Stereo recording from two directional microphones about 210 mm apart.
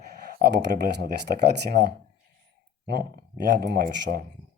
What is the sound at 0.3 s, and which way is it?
Speech, 50° right (ahead or behind).